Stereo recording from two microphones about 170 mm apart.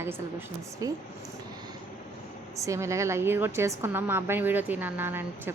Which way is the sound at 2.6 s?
15° right (ahead or behind).